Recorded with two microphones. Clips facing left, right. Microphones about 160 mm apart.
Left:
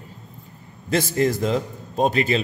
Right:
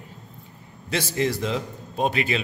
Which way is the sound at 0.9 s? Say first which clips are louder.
Left 4 dB; 45° left (ahead or behind).